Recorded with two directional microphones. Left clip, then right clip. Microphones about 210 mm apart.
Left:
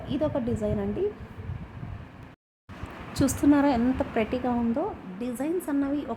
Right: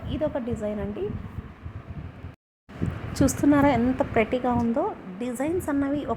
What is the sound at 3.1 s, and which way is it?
A woman's voice, 10° right (ahead or behind).